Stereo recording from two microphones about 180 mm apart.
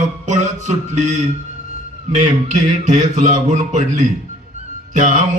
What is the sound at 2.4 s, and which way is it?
A man's voice, 40° right (ahead or behind).